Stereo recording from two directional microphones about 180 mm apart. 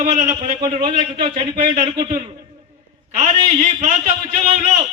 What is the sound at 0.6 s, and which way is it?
Speech, 25° right (ahead or behind).